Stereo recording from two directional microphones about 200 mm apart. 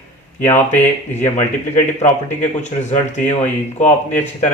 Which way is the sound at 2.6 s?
35° left (ahead or behind).